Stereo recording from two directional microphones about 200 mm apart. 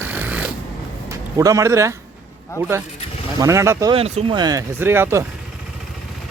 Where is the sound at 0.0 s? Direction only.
10° right (ahead or behind).